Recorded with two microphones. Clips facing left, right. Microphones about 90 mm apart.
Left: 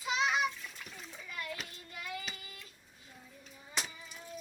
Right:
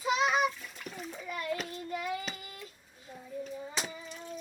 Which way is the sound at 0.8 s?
Centre (ahead or behind).